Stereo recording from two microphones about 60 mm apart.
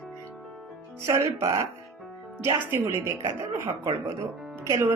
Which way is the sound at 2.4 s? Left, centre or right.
Right.